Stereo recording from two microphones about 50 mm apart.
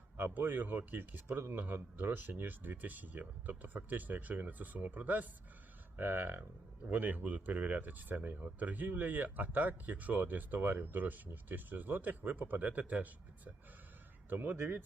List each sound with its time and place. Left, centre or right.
0.2 s speech: right
1.4 s speech: right
1.6 s speech: right
6.0 s speech: right
6.9 s speech: right